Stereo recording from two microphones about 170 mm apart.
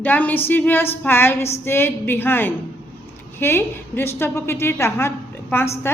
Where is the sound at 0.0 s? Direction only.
10° left (ahead or behind).